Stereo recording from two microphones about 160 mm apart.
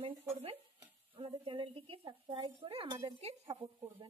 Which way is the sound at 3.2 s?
40° right (ahead or behind).